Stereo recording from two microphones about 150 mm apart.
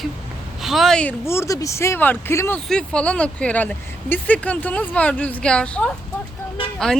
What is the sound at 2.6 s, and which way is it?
Speech, 5° left (ahead or behind).